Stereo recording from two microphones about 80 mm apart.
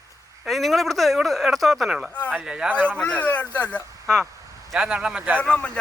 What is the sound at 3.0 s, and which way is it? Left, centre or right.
Speech, centre.